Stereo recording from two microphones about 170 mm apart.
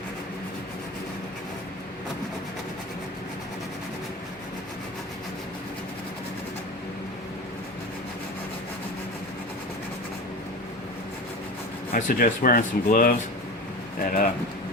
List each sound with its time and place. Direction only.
11.9 s speech: 50° left (ahead or behind)